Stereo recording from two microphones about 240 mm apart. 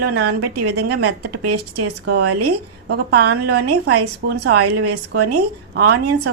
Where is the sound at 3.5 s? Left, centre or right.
Right.